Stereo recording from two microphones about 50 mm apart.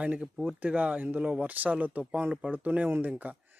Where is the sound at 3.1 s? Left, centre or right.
Right.